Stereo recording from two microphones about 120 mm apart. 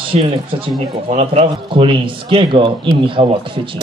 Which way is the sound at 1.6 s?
45° right (ahead or behind).